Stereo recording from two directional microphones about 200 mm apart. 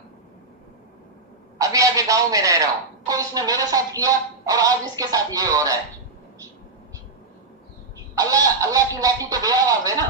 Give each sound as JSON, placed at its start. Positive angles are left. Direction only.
{"t": 1.5, "sound": "a man's voice", "side_deg": -15}
{"t": 8.1, "sound": "speech", "side_deg": -20}